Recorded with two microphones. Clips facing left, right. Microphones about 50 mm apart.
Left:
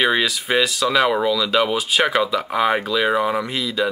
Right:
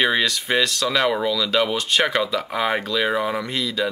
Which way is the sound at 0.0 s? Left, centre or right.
Centre.